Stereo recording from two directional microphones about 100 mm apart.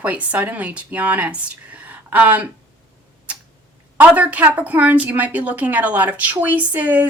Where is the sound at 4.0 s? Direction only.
15° right (ahead or behind).